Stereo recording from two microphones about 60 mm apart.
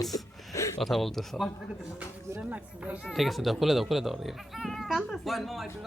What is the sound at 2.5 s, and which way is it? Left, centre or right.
Speech, right.